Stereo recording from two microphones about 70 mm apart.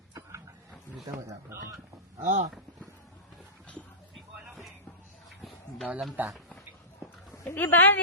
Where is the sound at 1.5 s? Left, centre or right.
Right.